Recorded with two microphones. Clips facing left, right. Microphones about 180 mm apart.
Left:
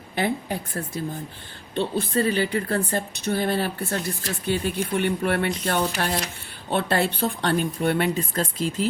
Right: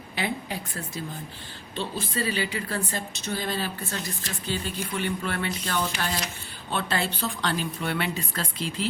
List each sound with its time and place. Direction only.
0.2 s speech: 50° left (ahead or behind)
3.8 s speech: 35° left (ahead or behind)
4.4 s speech: 60° left (ahead or behind)